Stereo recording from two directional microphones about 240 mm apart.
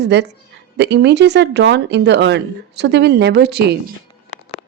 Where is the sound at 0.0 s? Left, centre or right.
Right.